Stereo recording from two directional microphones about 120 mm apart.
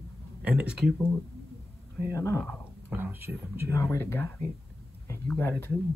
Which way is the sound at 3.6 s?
20° left (ahead or behind).